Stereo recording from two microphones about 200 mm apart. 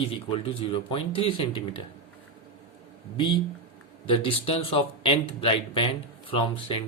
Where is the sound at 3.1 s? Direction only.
25° left (ahead or behind).